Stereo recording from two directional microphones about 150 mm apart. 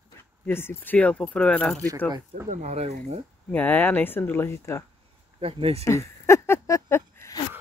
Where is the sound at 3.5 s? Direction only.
10° left (ahead or behind).